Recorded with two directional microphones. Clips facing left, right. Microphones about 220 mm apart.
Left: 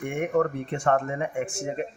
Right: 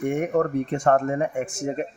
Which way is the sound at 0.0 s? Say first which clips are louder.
Right 2 dB; 40° right (ahead or behind).